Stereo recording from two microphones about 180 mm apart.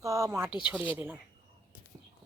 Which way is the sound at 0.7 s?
10° right (ahead or behind).